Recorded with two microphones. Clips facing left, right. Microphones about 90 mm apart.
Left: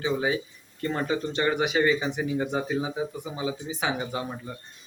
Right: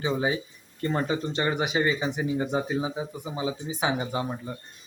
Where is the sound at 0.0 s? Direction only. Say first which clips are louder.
Even; 25° right (ahead or behind).